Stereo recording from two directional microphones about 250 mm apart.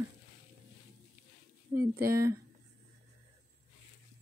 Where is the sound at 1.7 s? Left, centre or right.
Centre.